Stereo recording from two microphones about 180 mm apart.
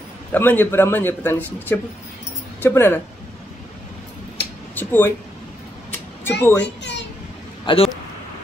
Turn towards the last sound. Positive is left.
turn(degrees=30)  # may be behind; listen again after turning